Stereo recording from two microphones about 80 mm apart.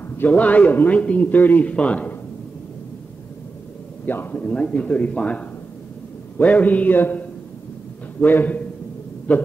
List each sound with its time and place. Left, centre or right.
0.3 s a man's voice: centre
4.0 s a man's voice: left